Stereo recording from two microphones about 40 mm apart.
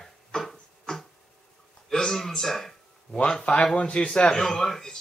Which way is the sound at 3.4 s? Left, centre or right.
Left.